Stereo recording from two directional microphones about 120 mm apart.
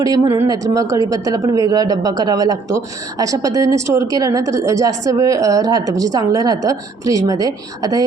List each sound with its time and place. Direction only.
0.4 s speech: 30° right (ahead or behind)